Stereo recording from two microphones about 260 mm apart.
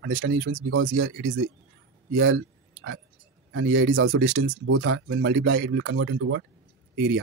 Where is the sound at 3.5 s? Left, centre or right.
Right.